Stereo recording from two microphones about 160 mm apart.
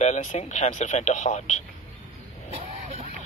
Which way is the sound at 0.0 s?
45° left (ahead or behind).